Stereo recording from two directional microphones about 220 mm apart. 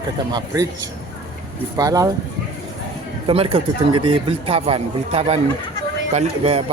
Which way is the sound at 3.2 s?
25° right (ahead or behind).